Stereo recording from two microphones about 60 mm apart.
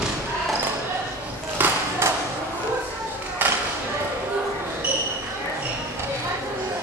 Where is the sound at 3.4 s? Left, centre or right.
Right.